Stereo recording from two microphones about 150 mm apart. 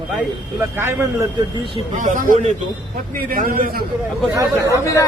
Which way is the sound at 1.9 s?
55° right (ahead or behind).